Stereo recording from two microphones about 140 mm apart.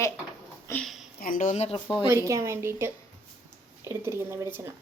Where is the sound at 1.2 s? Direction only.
75° left (ahead or behind).